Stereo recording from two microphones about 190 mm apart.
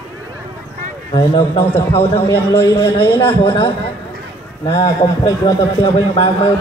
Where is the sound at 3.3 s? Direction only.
25° left (ahead or behind).